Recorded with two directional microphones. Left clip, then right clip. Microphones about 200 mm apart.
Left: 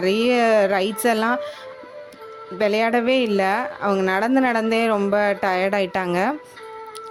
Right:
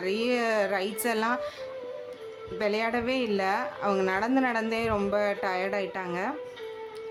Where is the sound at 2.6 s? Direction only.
40° left (ahead or behind).